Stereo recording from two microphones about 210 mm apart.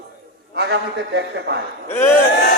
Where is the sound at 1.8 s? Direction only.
10° left (ahead or behind).